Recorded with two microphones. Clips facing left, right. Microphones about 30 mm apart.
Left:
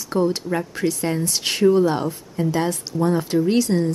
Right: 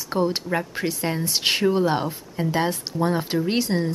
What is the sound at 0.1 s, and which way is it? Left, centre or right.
Speech, centre.